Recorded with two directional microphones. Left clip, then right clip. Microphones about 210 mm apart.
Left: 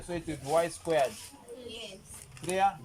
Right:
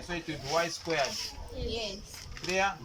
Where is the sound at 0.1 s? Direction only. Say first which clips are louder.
Left 2 dB; 30° left (ahead or behind).